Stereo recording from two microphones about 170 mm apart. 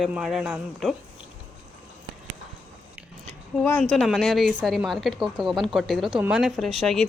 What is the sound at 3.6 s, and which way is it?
A woman's voice, 5° left (ahead or behind).